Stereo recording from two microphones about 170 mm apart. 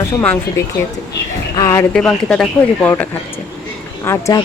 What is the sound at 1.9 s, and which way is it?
A woman's voice, 5° left (ahead or behind).